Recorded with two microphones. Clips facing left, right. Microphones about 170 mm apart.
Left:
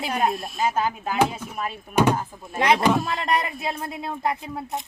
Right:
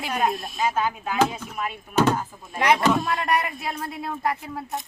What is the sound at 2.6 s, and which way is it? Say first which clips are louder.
Speech: left 1 dB; 25° left (ahead or behind).